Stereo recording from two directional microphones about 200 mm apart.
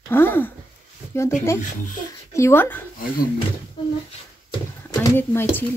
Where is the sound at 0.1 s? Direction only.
10° left (ahead or behind).